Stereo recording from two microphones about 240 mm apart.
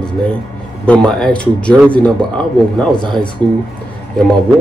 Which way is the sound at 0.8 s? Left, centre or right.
Centre.